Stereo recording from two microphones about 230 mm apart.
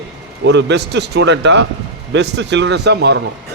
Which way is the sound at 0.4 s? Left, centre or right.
Right.